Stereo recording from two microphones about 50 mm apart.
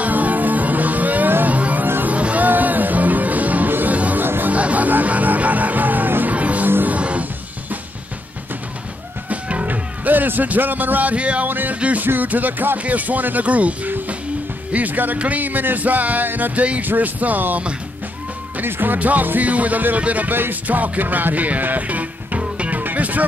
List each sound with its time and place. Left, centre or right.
0.0 s music: right
4.2 s music: right
4.6 s music: right
6.3 s music: right
7.0 s music: right
9.3 s music: right
11.4 s speech: right
11.7 s music: right
12.1 s speech: right
20.3 s music: right